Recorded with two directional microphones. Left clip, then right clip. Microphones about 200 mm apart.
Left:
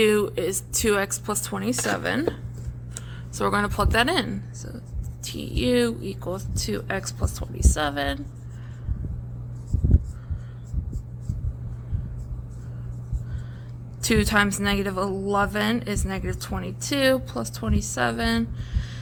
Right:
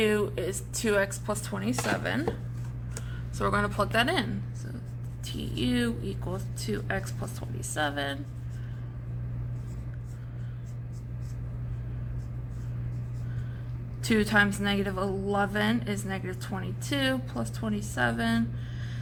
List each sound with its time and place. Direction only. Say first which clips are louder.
0.0 s speech: left 6 dB; 55° left (ahead or behind)
3.3 s a woman's voice: left 4 dB; 55° left (ahead or behind)
14.0 s a woman's voice: left 3 dB; 50° left (ahead or behind)